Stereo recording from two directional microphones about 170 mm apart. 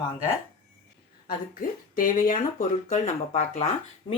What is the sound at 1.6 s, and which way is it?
Speech, 55° left (ahead or behind).